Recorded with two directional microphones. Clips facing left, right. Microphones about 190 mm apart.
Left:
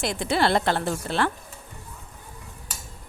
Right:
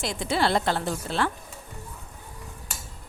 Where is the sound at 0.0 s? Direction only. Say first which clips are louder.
Left 2 dB; 60° left (ahead or behind).